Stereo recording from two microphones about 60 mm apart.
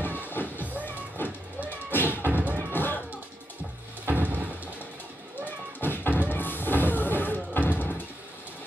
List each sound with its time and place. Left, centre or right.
0.0 s music: left
2.2 s music: right
2.7 s music: left
4.0 s a sound: right
5.8 s music: left